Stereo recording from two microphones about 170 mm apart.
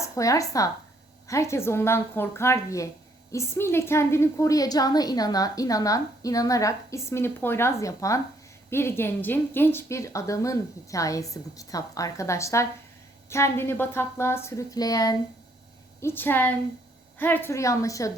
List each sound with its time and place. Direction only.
0.0 s a woman's voice: 20° left (ahead or behind)